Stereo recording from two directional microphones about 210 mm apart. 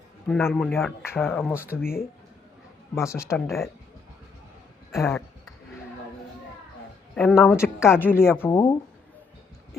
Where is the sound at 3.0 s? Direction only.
15° left (ahead or behind).